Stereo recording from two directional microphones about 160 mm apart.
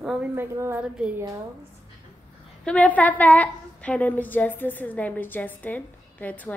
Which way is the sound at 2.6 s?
10° left (ahead or behind).